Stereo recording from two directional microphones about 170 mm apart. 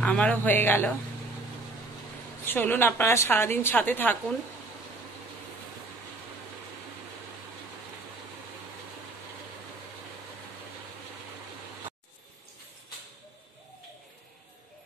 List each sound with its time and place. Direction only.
0.0 s a woman's voice: 10° left (ahead or behind)
2.4 s a woman's voice: 10° left (ahead or behind)